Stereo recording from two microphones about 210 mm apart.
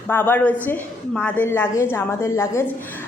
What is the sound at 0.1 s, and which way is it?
A woman's voice, 10° left (ahead or behind).